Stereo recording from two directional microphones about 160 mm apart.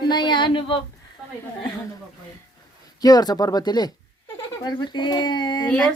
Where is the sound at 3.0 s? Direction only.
25° left (ahead or behind).